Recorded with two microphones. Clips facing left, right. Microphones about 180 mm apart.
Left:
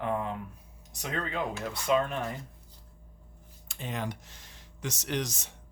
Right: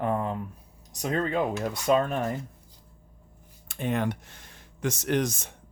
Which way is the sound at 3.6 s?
55° right (ahead or behind).